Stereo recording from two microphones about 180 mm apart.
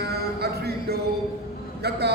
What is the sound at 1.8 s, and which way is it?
Speech, 65° right (ahead or behind).